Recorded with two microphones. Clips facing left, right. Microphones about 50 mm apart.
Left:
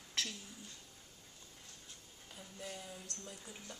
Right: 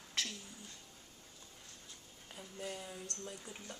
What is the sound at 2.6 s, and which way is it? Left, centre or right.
Speech, centre.